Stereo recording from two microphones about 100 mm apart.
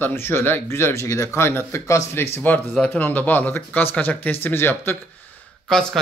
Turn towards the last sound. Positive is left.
turn(degrees=5)  # may be behind; listen again after turning